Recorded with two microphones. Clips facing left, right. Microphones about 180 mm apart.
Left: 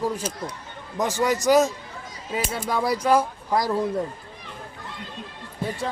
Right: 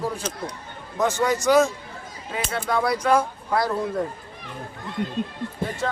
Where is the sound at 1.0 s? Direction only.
35° left (ahead or behind).